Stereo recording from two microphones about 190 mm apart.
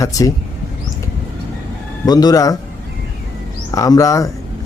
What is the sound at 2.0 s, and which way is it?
Speech, 20° left (ahead or behind).